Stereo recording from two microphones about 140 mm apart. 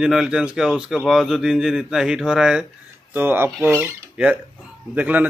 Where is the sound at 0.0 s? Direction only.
5° right (ahead or behind).